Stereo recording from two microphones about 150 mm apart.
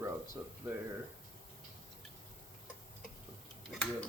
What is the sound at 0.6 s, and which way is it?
Speech, 20° right (ahead or behind).